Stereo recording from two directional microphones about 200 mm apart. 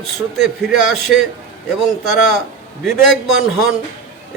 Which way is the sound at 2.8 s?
Centre (ahead or behind).